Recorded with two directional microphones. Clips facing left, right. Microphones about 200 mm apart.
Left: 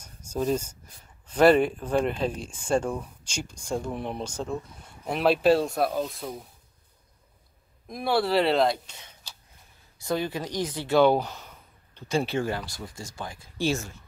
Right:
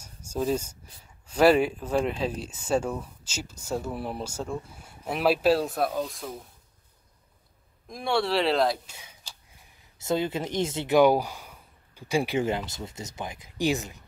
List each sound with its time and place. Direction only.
0.0 s speech: 10° right (ahead or behind)
7.9 s speech: 5° left (ahead or behind)
9.9 s speech: 25° right (ahead or behind)